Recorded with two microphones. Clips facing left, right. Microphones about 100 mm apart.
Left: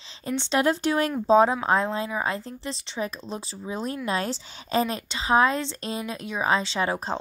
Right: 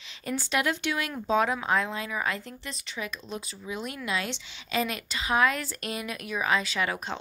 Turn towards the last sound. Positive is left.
turn(degrees=30)  # may be behind; listen again after turning